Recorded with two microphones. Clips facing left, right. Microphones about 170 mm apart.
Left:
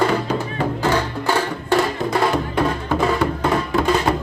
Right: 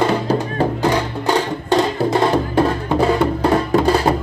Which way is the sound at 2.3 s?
30° right (ahead or behind).